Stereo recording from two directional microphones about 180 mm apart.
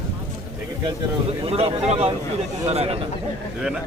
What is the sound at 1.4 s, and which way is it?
Speech, 35° right (ahead or behind).